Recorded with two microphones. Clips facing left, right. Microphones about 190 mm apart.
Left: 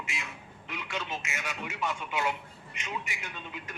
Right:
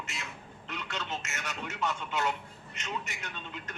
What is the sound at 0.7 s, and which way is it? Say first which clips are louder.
A man's voice: left 1 dB; 10° left (ahead or behind).